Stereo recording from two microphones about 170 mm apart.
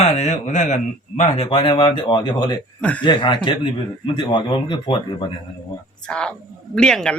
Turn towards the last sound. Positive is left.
turn(degrees=5)  # may be behind; listen again after turning